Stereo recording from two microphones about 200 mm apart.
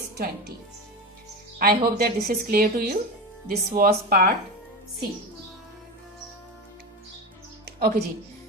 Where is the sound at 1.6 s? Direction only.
50° right (ahead or behind).